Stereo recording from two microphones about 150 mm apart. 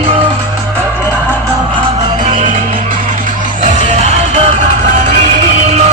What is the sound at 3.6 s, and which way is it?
Music, 55° right (ahead or behind).